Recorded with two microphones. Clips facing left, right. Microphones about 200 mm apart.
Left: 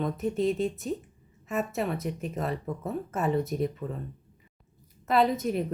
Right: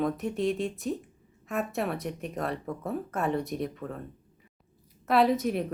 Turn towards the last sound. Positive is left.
turn(degrees=0)  # may be behind; listen again after turning